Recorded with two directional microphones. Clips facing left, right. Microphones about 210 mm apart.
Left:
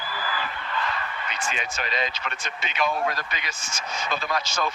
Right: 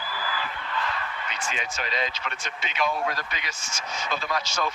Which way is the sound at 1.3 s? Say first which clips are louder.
Left 3 dB; 60° left (ahead or behind).